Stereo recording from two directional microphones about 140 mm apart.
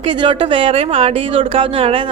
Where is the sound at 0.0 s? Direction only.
35° right (ahead or behind).